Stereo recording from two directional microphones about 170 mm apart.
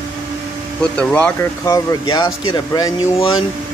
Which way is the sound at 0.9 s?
10° left (ahead or behind).